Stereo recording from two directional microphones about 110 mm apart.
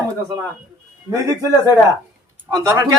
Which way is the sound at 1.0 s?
30° right (ahead or behind).